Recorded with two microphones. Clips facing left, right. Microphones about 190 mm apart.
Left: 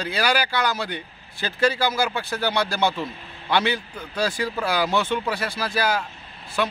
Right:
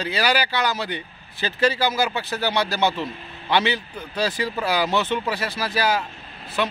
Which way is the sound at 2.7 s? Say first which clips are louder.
Right 1 dB; 10° left (ahead or behind).